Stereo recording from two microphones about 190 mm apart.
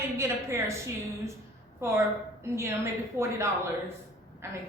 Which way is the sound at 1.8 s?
15° right (ahead or behind).